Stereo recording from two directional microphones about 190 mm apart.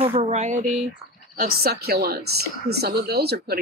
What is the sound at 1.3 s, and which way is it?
A woman's voice, 55° right (ahead or behind).